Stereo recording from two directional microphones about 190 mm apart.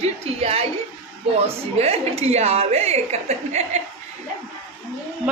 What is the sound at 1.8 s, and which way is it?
A woman's voice, 35° right (ahead or behind).